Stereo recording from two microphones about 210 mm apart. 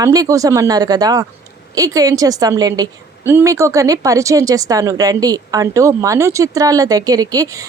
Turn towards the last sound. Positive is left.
turn(degrees=-15)  # may be behind; listen again after turning